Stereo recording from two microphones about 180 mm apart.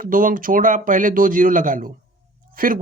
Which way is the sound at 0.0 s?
50° right (ahead or behind).